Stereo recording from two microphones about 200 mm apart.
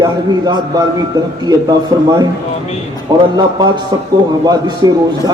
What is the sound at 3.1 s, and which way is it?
A man's voice, 20° right (ahead or behind).